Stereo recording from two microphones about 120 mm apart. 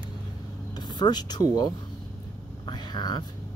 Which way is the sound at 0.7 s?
35° left (ahead or behind).